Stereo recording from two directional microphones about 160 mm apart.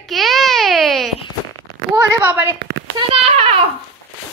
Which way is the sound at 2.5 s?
90° right.